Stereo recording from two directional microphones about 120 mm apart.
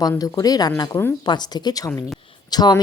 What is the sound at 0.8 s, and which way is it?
Speech, 20° left (ahead or behind).